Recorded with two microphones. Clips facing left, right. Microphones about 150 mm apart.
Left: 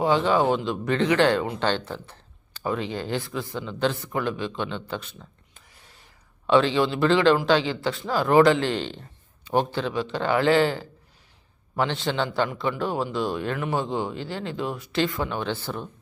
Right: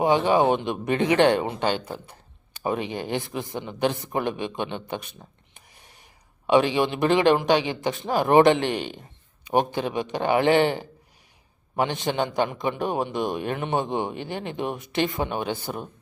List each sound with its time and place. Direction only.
0.0 s speech: 15° right (ahead or behind)
5.5 s whispering: 15° right (ahead or behind)
6.5 s a man's voice: 15° right (ahead or behind)